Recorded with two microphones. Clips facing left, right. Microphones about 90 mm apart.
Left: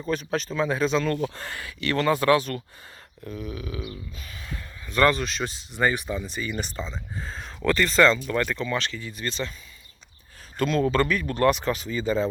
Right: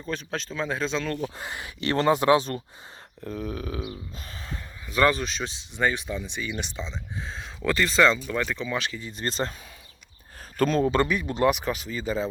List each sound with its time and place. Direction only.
0.0 s speech: 5° left (ahead or behind)
1.4 s speech: 20° right (ahead or behind)
3.2 s speech: 40° right (ahead or behind)
4.1 s speech: 30° right (ahead or behind)
4.9 s speech: 5° right (ahead or behind)
9.1 s speech: 40° right (ahead or behind)
10.6 s speech: 40° right (ahead or behind)
10.8 s speech: 20° right (ahead or behind); by 12.3 s centre (ahead or behind)